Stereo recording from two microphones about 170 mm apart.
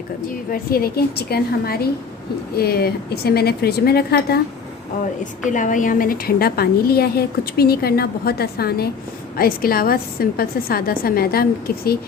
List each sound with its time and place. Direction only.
0.5 s a woman's voice: 60° left (ahead or behind)
5.2 s a woman's voice: 50° left (ahead or behind)